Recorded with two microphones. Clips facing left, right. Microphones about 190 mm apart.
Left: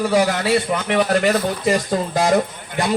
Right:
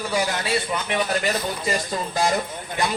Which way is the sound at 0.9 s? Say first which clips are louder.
Left 7 dB; 70° left (ahead or behind).